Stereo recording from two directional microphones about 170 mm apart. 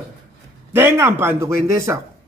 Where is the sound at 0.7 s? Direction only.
15° right (ahead or behind).